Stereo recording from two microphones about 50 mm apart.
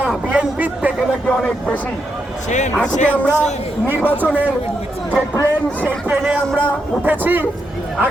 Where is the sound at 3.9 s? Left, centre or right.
Right.